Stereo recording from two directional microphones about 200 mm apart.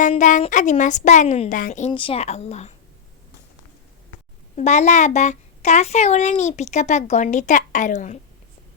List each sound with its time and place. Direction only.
0.1 s a child's voice: 40° left (ahead or behind)
1.9 s a child's voice: 25° left (ahead or behind)
4.5 s a child's voice: 35° left (ahead or behind)